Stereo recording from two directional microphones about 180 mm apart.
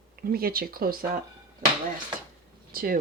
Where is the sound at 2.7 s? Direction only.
50° right (ahead or behind).